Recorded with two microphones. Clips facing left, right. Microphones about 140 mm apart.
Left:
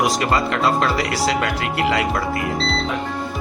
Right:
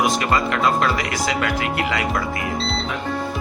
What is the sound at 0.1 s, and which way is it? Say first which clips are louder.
Speech: left 1 dB; 30° left (ahead or behind).